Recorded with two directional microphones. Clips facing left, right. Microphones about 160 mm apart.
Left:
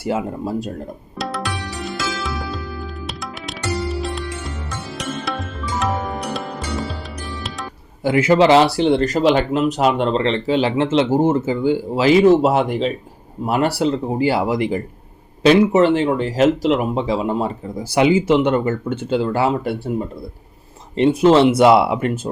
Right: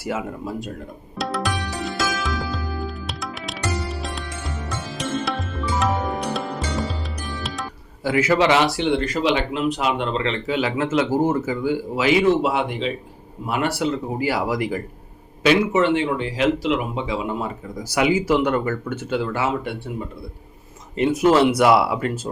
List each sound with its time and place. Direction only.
0.0 s speech: 30° left (ahead or behind)
1.8 s music: centre (ahead or behind)
8.0 s speech: 25° left (ahead or behind)
15.4 s speech: 40° left (ahead or behind)
20.9 s speech: 30° left (ahead or behind)